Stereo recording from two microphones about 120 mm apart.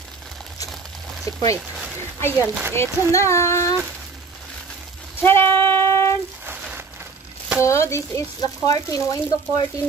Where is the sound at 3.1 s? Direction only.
25° left (ahead or behind).